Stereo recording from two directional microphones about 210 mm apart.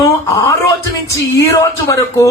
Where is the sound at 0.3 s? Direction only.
15° left (ahead or behind).